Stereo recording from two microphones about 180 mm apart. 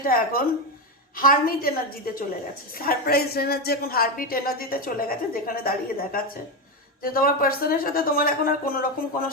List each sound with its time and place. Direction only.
0.0 s speech: 55° left (ahead or behind)
2.7 s a woman's voice: 55° left (ahead or behind)